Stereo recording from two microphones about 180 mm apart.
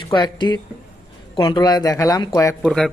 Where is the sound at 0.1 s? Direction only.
25° left (ahead or behind).